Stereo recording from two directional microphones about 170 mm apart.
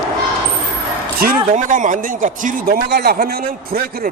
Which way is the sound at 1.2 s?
55° right (ahead or behind).